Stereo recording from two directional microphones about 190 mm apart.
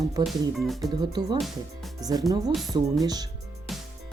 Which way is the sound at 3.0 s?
20° right (ahead or behind).